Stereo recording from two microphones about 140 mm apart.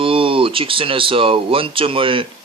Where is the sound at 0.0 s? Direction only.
40° right (ahead or behind).